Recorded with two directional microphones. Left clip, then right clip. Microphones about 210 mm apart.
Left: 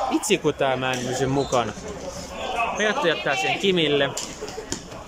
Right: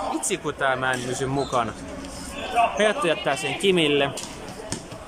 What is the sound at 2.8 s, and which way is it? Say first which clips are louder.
A man's voice: even; centre (ahead or behind).